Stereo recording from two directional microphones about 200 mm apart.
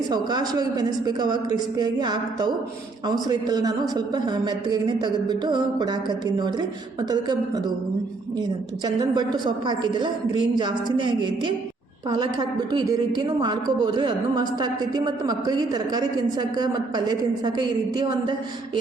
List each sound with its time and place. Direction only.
0.1 s a woman's voice: 20° right (ahead or behind)